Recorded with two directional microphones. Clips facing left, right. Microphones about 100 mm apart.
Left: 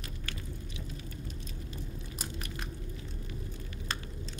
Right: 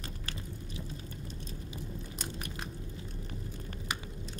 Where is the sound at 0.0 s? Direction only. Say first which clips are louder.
Even; 35° right (ahead or behind).